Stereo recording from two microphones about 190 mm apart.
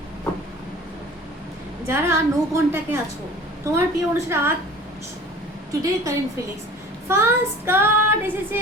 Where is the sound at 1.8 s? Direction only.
15° right (ahead or behind).